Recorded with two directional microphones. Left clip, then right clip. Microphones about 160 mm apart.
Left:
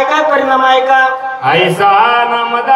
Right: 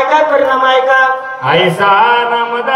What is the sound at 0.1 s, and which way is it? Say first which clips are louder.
A man's voice: right 1 dB; 40° left (ahead or behind).